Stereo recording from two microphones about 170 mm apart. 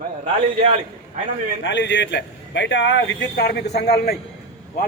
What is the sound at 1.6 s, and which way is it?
A man's voice, 90° left.